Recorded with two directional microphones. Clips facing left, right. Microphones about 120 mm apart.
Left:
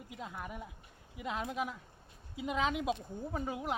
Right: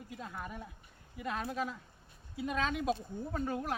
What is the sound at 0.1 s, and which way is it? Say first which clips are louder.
A man's voice: even; 15° left (ahead or behind).